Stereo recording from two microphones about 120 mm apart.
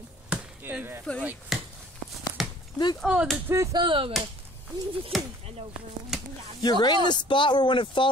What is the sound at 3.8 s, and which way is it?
Speech, 45° right (ahead or behind).